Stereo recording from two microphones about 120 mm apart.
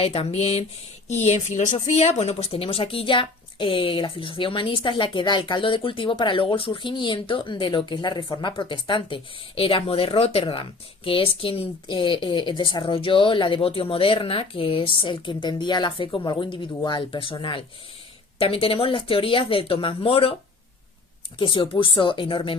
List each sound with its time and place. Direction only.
0.0 s speech: 55° left (ahead or behind)
21.3 s speech: 45° left (ahead or behind)